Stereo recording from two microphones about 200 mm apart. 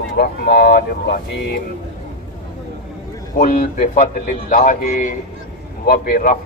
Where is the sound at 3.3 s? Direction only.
45° left (ahead or behind).